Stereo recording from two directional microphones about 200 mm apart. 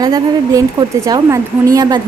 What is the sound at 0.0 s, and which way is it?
A woman's voice, 20° right (ahead or behind).